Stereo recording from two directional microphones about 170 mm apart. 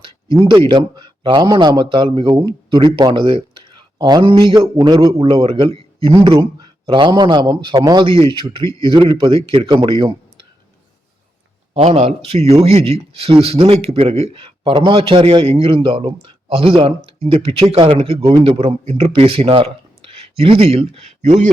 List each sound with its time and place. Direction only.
0.4 s a man's voice: 30° right (ahead or behind)
11.7 s speech: 40° right (ahead or behind)